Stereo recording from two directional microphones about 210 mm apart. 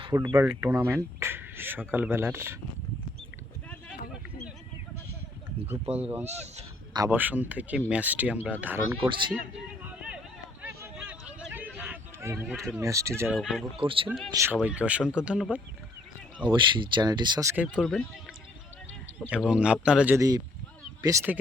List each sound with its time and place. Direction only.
0.0 s speech: 15° right (ahead or behind)
5.6 s speech: 10° right (ahead or behind)
6.2 s speech: 30° right (ahead or behind)
6.9 s speech: 15° right (ahead or behind)
9.0 s speech: 25° right (ahead or behind)
9.8 s a sound: 5° right (ahead or behind)
12.8 s speech: 15° right (ahead or behind)
13.2 s speech: centre (ahead or behind)
13.7 s speech: 25° right (ahead or behind)
14.3 s speech: 10° right (ahead or behind)
16.5 s speech: 20° right (ahead or behind)
17.7 s speech: 5° left (ahead or behind)
19.3 s speech: 5° right (ahead or behind)